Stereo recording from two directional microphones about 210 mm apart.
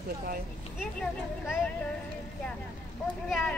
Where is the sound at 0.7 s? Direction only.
Centre (ahead or behind).